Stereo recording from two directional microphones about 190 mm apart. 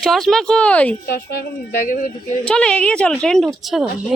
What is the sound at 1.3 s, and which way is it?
Speech, 45° left (ahead or behind).